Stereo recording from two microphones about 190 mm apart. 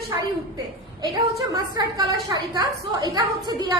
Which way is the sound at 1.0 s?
20° right (ahead or behind).